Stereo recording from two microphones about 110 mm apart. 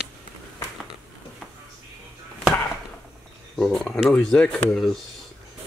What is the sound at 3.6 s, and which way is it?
Speech, centre (ahead or behind).